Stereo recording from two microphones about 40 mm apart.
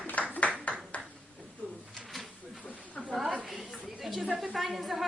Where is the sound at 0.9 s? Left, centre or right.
Left.